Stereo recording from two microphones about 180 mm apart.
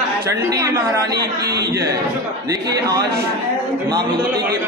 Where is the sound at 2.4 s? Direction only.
20° right (ahead or behind).